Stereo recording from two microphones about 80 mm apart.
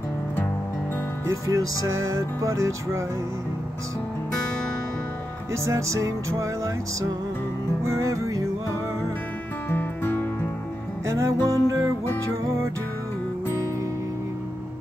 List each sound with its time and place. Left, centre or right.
1.3 s music: right
5.5 s music: right
9.7 s music: left
11.1 s music: right